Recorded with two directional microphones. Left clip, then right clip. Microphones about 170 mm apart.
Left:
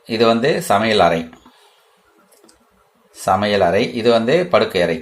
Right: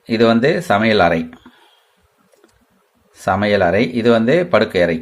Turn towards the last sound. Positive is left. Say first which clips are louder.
# right 1 dB
turn(degrees=-30)  # may be behind; listen again after turning